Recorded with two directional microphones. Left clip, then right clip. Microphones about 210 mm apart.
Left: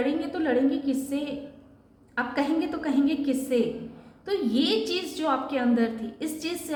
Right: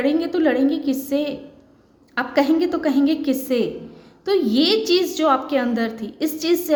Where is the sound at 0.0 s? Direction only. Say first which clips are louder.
Right 8 dB; 50° right (ahead or behind).